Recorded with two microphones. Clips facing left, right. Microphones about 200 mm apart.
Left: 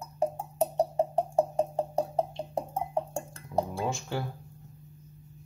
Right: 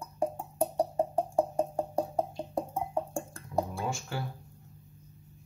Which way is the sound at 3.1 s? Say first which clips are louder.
Left 1 dB; 25° left (ahead or behind).